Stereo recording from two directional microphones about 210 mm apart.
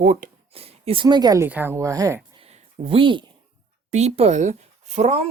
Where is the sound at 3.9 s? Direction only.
30° right (ahead or behind).